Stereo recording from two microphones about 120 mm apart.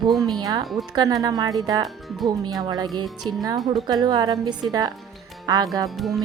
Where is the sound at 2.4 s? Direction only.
35° right (ahead or behind).